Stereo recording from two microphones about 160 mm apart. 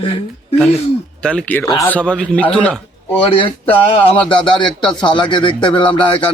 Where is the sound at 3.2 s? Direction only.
35° left (ahead or behind).